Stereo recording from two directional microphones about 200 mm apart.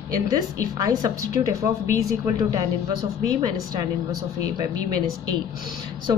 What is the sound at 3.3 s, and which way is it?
A woman's voice, 20° right (ahead or behind).